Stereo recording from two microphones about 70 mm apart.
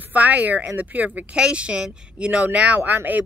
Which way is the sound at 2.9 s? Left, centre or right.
Right.